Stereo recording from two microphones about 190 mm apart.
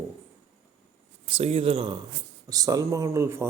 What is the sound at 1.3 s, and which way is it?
Speech, 30° right (ahead or behind).